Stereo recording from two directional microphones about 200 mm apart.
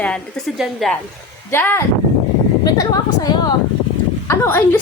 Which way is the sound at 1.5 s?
10° left (ahead or behind).